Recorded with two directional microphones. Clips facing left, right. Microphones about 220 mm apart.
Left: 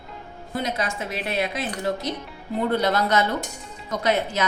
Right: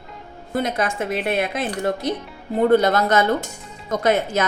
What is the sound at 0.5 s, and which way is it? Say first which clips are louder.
A woman's voice: right 5 dB; 50° right (ahead or behind).